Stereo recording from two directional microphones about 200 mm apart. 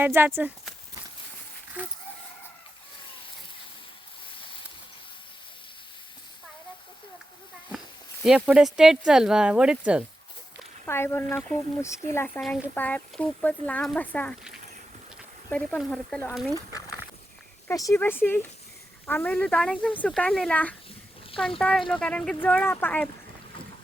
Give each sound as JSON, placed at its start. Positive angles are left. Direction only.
{"t": 0.0, "sound": "speech", "side_deg": -10}
{"t": 8.2, "sound": "speech", "side_deg": -5}
{"t": 10.8, "sound": "speech", "side_deg": 10}
{"t": 15.4, "sound": "speech", "side_deg": 5}
{"t": 17.7, "sound": "speech", "side_deg": 15}